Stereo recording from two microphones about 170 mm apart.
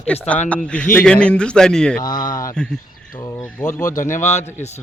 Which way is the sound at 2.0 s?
25° left (ahead or behind).